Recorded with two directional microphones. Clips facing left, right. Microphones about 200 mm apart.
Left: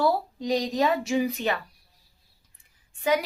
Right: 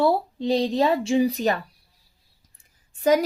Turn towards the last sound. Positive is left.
turn(degrees=-40)  # may be behind; listen again after turning